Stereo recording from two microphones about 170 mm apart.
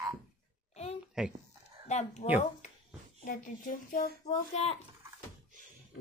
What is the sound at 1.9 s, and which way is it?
Speech, 40° left (ahead or behind).